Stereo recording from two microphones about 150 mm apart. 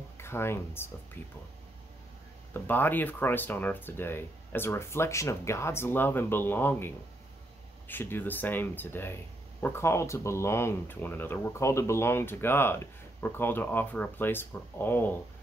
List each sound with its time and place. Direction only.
0.2 s speech: 15° left (ahead or behind)
2.5 s speech: 15° left (ahead or behind)
7.9 s speech: 15° left (ahead or behind)